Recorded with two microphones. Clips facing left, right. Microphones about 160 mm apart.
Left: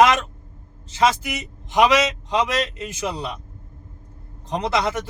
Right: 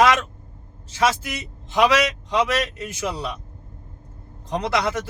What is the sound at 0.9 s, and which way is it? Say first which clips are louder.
A man's voice: left 2 dB; 20° left (ahead or behind).